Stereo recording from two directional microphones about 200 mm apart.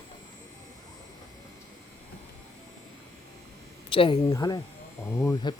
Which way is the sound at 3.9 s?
25° left (ahead or behind).